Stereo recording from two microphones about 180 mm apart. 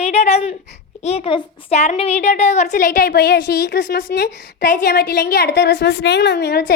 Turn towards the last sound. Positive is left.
turn(degrees=65)  # may be behind; listen again after turning